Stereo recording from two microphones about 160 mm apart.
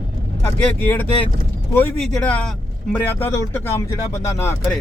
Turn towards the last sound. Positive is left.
turn(degrees=15)  # may be behind; listen again after turning